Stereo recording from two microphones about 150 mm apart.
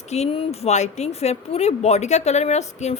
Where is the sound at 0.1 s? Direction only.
45° left (ahead or behind).